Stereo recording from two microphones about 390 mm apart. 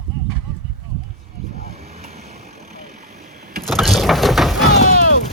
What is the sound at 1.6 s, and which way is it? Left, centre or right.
Vehicle, centre.